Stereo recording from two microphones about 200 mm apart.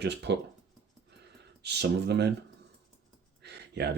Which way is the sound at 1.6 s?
55° right (ahead or behind).